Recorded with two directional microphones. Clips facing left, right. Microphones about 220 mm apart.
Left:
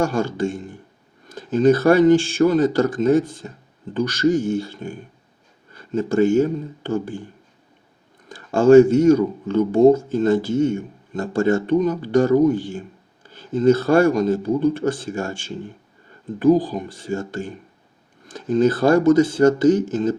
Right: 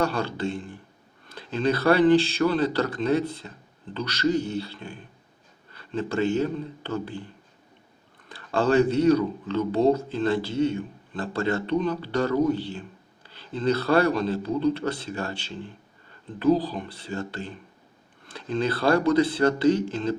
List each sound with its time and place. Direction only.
0.0 s speech: 45° left (ahead or behind)
8.3 s speech: 45° left (ahead or behind)